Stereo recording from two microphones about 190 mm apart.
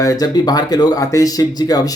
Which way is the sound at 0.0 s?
20° left (ahead or behind).